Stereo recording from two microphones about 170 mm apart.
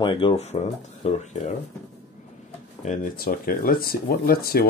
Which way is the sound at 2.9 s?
55° left (ahead or behind).